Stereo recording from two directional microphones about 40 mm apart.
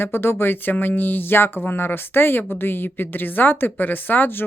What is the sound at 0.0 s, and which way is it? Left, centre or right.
A woman's voice, left.